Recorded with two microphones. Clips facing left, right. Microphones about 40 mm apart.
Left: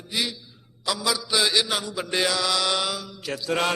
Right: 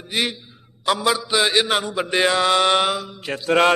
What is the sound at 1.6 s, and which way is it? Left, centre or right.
A man's voice, right.